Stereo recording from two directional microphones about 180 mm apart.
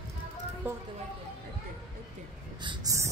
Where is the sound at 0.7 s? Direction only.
10° right (ahead or behind).